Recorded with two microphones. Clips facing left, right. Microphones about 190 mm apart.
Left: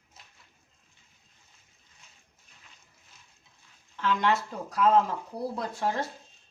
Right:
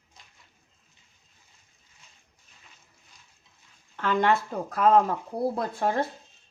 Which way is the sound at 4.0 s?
50° right (ahead or behind).